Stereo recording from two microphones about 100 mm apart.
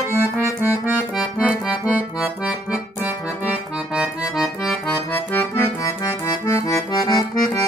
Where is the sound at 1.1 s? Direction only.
5° right (ahead or behind).